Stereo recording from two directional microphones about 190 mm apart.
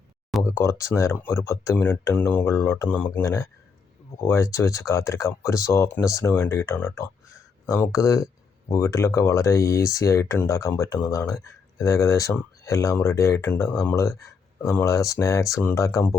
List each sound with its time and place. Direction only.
0.4 s speech: 15° left (ahead or behind)